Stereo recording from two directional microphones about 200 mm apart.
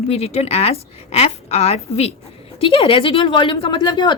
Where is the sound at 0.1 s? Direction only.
30° left (ahead or behind).